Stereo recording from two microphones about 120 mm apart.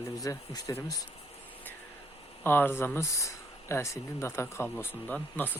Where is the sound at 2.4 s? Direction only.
15° left (ahead or behind).